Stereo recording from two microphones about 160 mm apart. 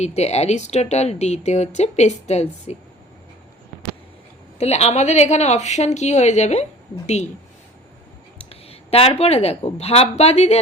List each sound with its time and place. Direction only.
0.0 s speech: 40° left (ahead or behind)
4.5 s speech: 40° left (ahead or behind)
8.4 s speech: 35° left (ahead or behind)